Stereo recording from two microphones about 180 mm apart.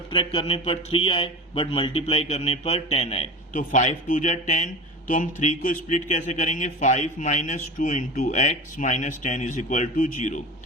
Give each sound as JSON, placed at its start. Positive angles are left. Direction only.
{"t": 0.1, "sound": "speech", "side_deg": 30}